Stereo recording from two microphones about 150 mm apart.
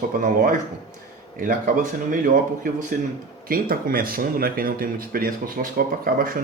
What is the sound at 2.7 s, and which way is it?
Speech, 70° right (ahead or behind).